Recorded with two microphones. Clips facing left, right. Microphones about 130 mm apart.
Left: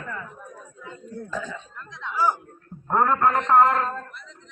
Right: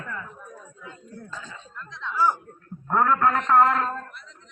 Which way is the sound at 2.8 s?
20° left (ahead or behind).